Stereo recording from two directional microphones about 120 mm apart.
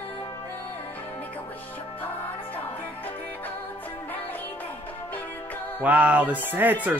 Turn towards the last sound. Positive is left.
turn(degrees=-15)  # may be behind; listen again after turning